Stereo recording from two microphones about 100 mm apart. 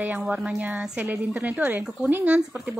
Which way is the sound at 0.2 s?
5° right (ahead or behind).